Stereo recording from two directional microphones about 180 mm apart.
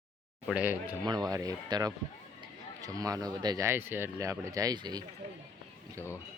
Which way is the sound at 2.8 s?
20° right (ahead or behind).